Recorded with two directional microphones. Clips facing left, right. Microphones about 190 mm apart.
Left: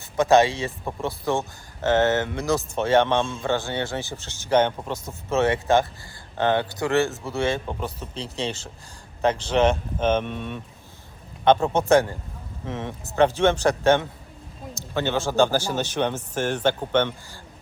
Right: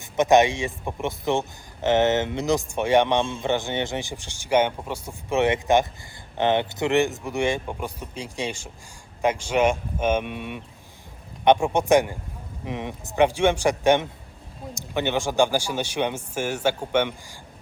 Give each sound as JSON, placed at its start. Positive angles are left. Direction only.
{"t": 0.0, "sound": "a man's voice", "side_deg": -15}